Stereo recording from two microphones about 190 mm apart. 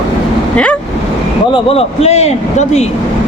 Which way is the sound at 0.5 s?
5° left (ahead or behind).